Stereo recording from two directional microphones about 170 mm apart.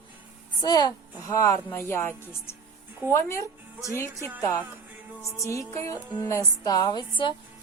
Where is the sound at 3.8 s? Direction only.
15° left (ahead or behind).